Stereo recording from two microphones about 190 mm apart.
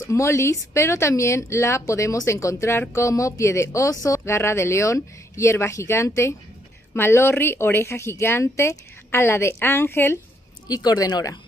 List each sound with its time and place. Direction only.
0.0 s speech: 15° left (ahead or behind)